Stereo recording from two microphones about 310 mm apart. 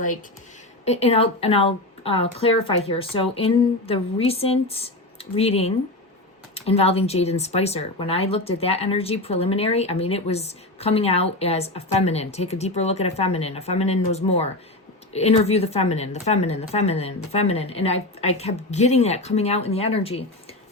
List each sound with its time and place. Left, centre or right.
0.9 s speech: centre